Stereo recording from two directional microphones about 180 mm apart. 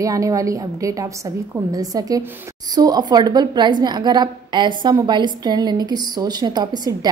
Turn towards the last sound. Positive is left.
turn(degrees=-20)  # may be behind; listen again after turning